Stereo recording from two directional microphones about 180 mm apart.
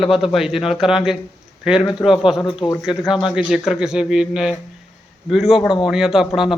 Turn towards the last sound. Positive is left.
turn(degrees=0)  # may be behind; listen again after turning